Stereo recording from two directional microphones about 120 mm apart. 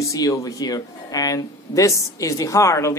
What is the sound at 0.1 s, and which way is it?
Speech, 30° left (ahead or behind).